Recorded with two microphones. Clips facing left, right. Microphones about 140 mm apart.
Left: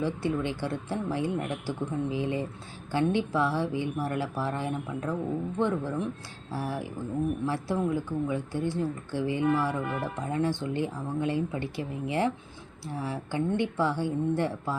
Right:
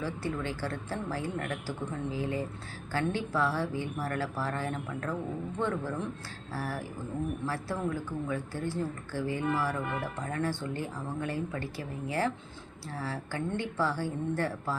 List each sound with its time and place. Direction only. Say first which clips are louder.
0.0 s speech: left 5 dB; 20° left (ahead or behind)